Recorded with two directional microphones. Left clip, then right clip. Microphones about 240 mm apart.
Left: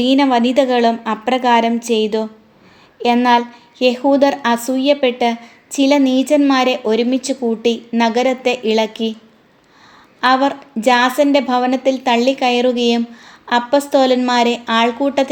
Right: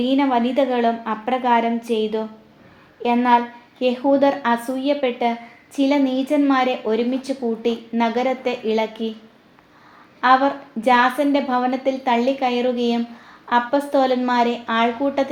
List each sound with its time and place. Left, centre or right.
0.0 s a woman's voice: left
10.2 s a woman's voice: left